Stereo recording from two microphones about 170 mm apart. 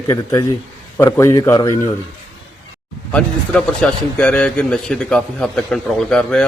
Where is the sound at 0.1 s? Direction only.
20° left (ahead or behind).